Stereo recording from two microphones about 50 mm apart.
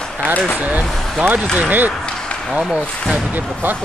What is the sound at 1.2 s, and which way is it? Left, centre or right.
Speech, right.